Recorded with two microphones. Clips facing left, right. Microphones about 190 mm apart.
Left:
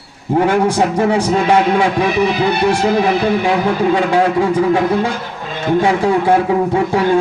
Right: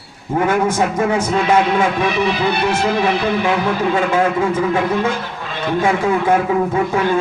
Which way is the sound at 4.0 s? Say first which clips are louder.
Left 2 dB; 35° left (ahead or behind).